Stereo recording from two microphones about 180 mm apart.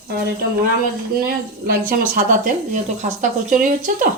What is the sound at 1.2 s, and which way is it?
A woman's voice, 55° right (ahead or behind).